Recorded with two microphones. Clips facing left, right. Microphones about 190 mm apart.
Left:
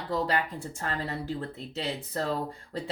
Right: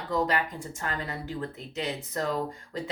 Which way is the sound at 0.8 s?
35° left (ahead or behind).